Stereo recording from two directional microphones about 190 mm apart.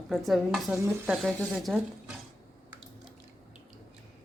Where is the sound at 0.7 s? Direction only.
15° right (ahead or behind).